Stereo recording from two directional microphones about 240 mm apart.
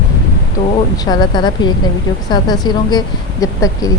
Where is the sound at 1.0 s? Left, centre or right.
Centre.